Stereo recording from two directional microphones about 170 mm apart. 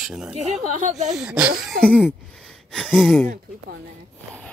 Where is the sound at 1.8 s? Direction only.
5° left (ahead or behind).